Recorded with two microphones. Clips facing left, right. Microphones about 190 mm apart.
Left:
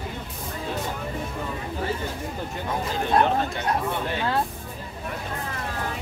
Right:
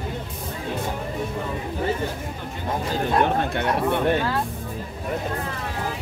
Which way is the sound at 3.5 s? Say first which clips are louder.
Right 4 dB; 60° right (ahead or behind).